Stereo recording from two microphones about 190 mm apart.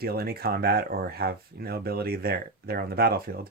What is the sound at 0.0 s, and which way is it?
Speech, 55° right (ahead or behind).